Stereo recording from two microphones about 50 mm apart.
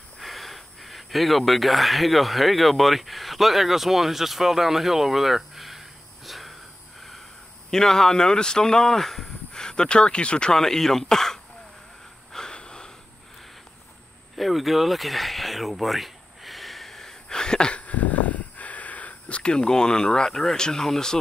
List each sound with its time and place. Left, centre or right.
0.2 s speech: centre
7.0 s snort: centre
7.7 s speech: centre
10.5 s speech: centre
12.3 s a sound: centre
14.3 s a sound: centre